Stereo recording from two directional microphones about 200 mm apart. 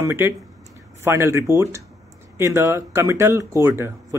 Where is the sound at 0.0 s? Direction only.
10° right (ahead or behind).